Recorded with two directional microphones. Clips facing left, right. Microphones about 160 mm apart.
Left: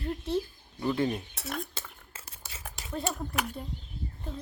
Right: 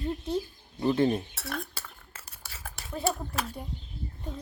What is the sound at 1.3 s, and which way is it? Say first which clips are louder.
Cutlery: even; 20° left (ahead or behind).